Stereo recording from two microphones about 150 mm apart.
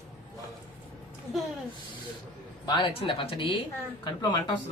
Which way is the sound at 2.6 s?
35° left (ahead or behind).